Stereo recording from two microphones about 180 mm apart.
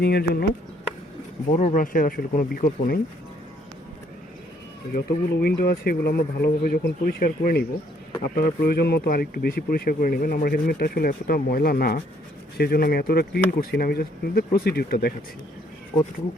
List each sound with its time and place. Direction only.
0.0 s speech: 60° left (ahead or behind)
1.5 s speech: 45° left (ahead or behind)
4.9 s speech: 55° left (ahead or behind)